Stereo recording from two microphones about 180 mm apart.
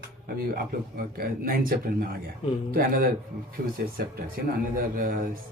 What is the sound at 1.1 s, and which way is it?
Speech, 55° right (ahead or behind).